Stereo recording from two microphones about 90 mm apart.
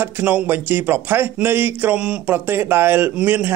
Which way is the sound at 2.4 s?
25° right (ahead or behind).